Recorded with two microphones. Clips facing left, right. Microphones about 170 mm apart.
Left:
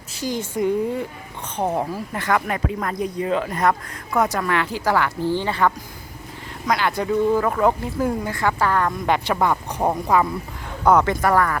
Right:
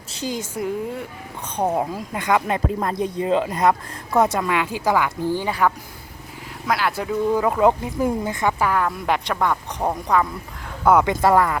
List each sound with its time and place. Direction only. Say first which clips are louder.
0.3 s speech: left 6 dB; 5° right (ahead or behind)
2.6 s speech: right 2 dB; 25° right (ahead or behind); by 7.3 s 5° right (ahead or behind)
7.3 s speech: right 1 dB; 15° right (ahead or behind); by 10.2 s 5° left (ahead or behind)
10.8 s speech: right 1 dB; 15° right (ahead or behind)